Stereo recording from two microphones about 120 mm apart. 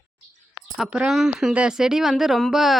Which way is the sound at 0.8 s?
5° right (ahead or behind).